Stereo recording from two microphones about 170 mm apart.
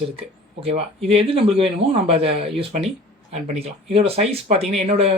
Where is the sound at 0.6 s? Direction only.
35° right (ahead or behind).